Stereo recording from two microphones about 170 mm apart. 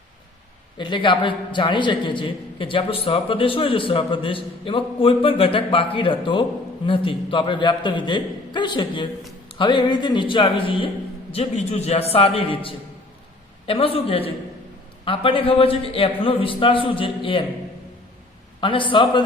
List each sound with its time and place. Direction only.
0.8 s a man's voice: 30° left (ahead or behind)
18.6 s a man's voice: 30° left (ahead or behind)